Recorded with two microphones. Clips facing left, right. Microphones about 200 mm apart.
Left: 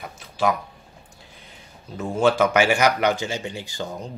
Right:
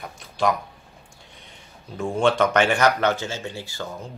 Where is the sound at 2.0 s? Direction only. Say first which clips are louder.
Left 1 dB; centre (ahead or behind).